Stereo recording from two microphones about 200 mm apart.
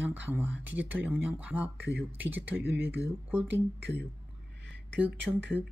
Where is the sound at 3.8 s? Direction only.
55° right (ahead or behind).